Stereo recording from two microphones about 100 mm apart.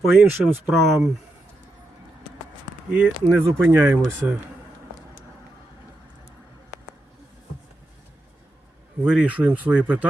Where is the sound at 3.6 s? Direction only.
20° right (ahead or behind).